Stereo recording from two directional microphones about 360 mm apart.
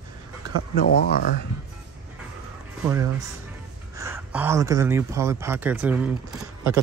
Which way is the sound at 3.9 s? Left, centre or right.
Centre.